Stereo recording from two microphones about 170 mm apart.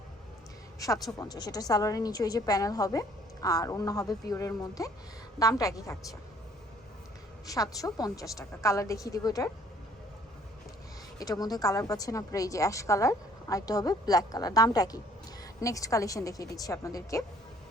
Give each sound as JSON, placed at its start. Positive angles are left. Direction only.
{"t": 0.8, "sound": "a woman's voice", "side_deg": 20}
{"t": 7.4, "sound": "a woman's voice", "side_deg": 20}
{"t": 11.2, "sound": "a woman's voice", "side_deg": 20}